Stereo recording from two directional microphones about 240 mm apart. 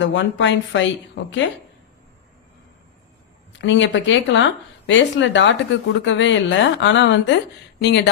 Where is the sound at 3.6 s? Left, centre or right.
Left.